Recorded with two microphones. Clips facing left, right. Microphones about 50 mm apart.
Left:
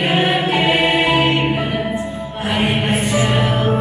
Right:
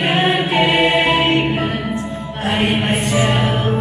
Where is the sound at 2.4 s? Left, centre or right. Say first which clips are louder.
Right 1 dB; centre.